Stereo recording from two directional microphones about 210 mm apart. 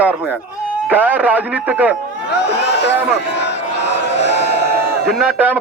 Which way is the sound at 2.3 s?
55° left (ahead or behind).